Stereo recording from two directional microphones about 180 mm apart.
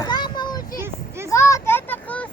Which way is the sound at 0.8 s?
15° right (ahead or behind).